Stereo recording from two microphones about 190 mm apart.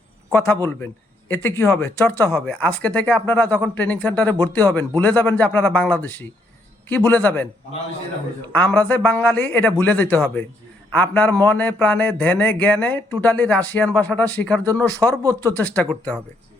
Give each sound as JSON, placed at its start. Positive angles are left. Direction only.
{"t": 0.3, "sound": "speech", "side_deg": 10}
{"t": 8.5, "sound": "speech", "side_deg": 10}